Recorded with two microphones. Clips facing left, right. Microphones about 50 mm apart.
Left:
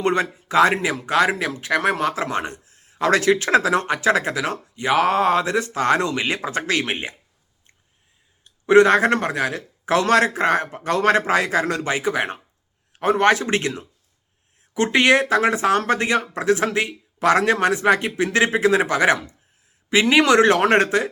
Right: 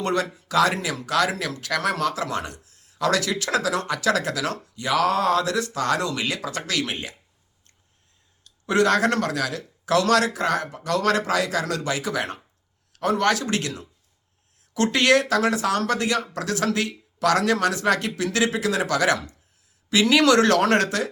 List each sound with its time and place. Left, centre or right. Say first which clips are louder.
0.0 s speech: left 4 dB; left
8.4 s speech: left 7 dB; left